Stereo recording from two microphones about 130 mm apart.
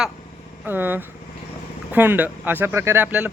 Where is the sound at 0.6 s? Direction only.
15° right (ahead or behind).